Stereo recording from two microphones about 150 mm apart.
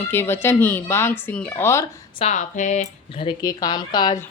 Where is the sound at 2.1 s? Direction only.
50° left (ahead or behind).